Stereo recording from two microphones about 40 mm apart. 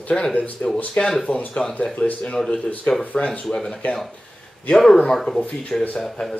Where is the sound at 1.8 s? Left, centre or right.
Left.